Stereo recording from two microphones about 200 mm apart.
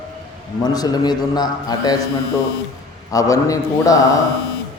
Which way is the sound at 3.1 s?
15° left (ahead or behind).